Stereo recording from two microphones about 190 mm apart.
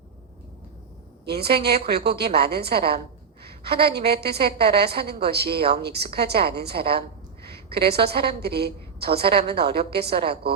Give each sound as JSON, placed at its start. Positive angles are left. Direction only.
{"t": 1.3, "sound": "a woman's voice", "side_deg": -55}
{"t": 9.2, "sound": "a woman's voice", "side_deg": -30}
{"t": 9.5, "sound": "a woman's voice", "side_deg": -55}